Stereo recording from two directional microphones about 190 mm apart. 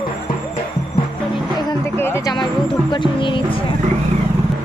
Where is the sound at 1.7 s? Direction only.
10° left (ahead or behind).